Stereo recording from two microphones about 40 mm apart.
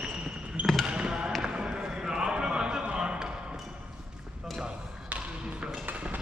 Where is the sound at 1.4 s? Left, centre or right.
Centre.